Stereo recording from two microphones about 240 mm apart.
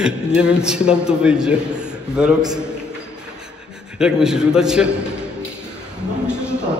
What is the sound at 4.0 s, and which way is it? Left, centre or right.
A man's voice, centre.